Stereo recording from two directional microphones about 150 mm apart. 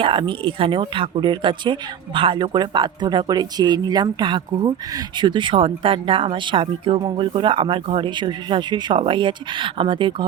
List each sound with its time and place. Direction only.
0.0 s speech: 35° right (ahead or behind)